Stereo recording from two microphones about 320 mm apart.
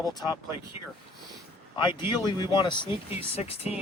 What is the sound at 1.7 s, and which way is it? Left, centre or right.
Speech, centre.